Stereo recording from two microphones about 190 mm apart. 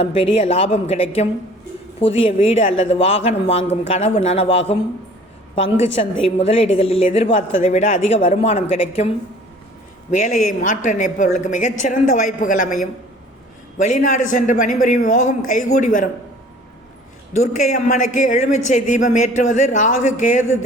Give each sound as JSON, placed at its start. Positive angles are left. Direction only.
{"t": 0.0, "sound": "a woman's voice", "side_deg": 30}
{"t": 5.8, "sound": "a woman's voice", "side_deg": 30}
{"t": 17.3, "sound": "a woman's voice", "side_deg": 40}